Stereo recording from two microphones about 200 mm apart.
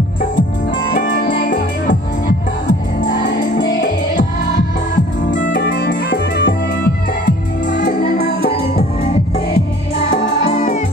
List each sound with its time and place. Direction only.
0.9 s music: 40° left (ahead or behind)
5.3 s music: 40° left (ahead or behind)
5.6 s music: 55° left (ahead or behind)
10.5 s music: 40° left (ahead or behind)